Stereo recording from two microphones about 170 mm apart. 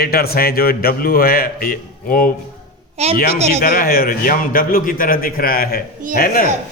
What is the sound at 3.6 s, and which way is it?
A man's voice, 60° left (ahead or behind).